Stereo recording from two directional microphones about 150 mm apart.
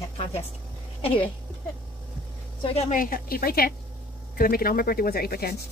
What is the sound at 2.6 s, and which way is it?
Speech, 40° left (ahead or behind).